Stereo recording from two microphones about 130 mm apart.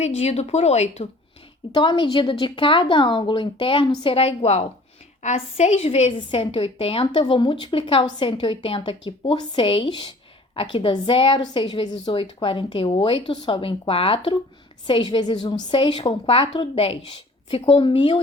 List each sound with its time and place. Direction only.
0.0 s speech: 55° left (ahead or behind)
1.7 s a woman's voice: 35° left (ahead or behind); by 6.1 s 55° left (ahead or behind)
6.1 s a woman's voice: 40° left (ahead or behind)